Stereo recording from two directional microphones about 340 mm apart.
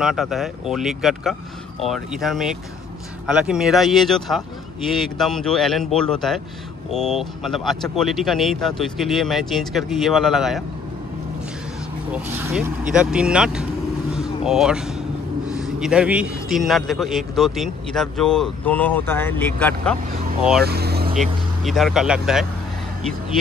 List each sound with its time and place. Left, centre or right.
0.0 s a man's voice: centre
12.1 s a man's voice: centre
14.1 s vehicle: centre
15.5 s a man's voice: centre
20.6 s vehicle: right
21.2 s a man's voice: centre